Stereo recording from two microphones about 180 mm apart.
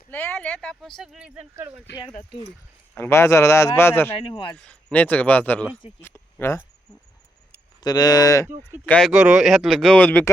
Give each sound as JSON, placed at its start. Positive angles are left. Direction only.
{"t": 0.1, "sound": "speech", "side_deg": 10}
{"t": 2.9, "sound": "a man's voice", "side_deg": 15}
{"t": 4.3, "sound": "speech", "side_deg": 25}
{"t": 4.5, "sound": "a man's voice", "side_deg": 5}
{"t": 7.8, "sound": "speech", "side_deg": 20}
{"t": 8.9, "sound": "speech", "side_deg": 0}